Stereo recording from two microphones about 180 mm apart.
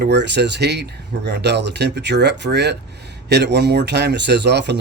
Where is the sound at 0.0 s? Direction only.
70° right (ahead or behind).